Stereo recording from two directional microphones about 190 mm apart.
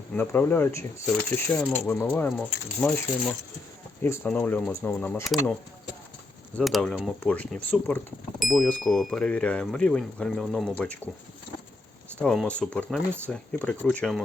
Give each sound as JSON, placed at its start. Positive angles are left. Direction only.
{"t": 0.1, "sound": "speech", "side_deg": 10}
{"t": 4.0, "sound": "speech", "side_deg": 10}
{"t": 6.6, "sound": "speech", "side_deg": 0}
{"t": 12.2, "sound": "speech", "side_deg": 5}